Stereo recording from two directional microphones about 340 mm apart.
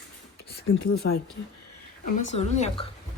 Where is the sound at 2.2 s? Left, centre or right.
Centre.